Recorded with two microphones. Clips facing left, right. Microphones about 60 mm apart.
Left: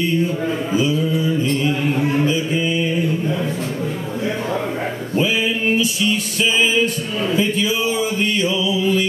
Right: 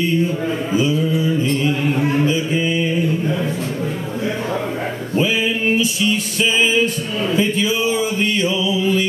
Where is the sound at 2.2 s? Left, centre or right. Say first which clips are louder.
Right 1 dB; right.